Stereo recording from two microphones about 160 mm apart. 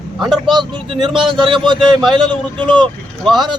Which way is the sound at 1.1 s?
30° right (ahead or behind).